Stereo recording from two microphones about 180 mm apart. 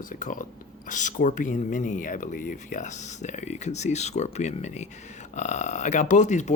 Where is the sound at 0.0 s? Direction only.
50° left (ahead or behind).